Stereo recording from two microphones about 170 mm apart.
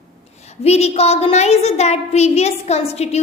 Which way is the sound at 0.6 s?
40° left (ahead or behind).